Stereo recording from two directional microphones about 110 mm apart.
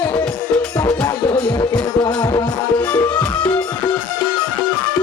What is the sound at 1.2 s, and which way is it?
Music, 40° left (ahead or behind).